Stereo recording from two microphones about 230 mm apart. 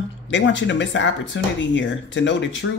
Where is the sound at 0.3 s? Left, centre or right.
Left.